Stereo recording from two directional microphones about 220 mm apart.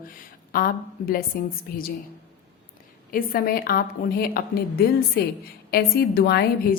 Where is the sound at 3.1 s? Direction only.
40° left (ahead or behind).